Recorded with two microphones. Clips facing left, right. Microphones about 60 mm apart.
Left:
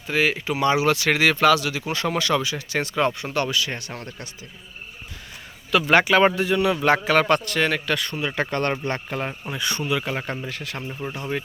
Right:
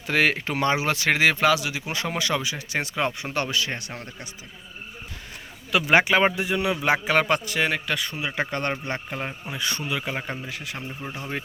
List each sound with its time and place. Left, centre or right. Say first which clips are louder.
0.1 s a man's voice: even; right; by 4.3 s centre
5.9 s a man's voice: left 2 dB; centre
11.1 s speech: left 4 dB; right